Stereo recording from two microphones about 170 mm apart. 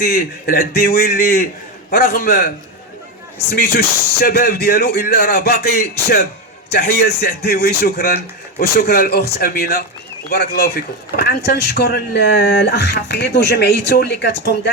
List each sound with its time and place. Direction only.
0.0 s a man's voice: 65° left (ahead or behind)
3.5 s a man's voice: 70° left (ahead or behind); by 14.7 s 85° left